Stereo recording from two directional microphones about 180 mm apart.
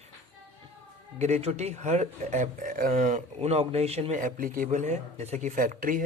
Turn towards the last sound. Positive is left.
turn(degrees=-50)  # may be behind; listen again after turning